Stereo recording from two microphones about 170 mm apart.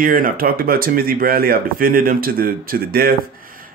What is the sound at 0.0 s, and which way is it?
Speech, 55° right (ahead or behind).